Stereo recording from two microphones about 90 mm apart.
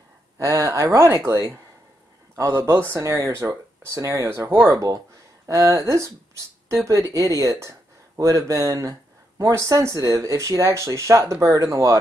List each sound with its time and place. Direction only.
0.4 s speech: 35° right (ahead or behind)